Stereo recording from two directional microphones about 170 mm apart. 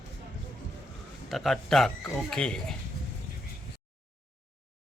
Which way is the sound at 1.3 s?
Centre (ahead or behind).